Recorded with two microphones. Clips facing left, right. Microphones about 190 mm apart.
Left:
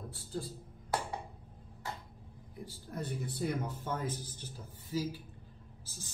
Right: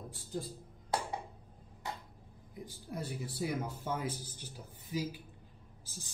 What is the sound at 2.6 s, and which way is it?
Speech, 10° right (ahead or behind).